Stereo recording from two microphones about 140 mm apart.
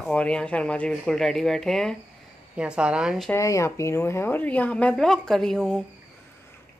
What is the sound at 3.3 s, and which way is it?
Speech, 20° left (ahead or behind).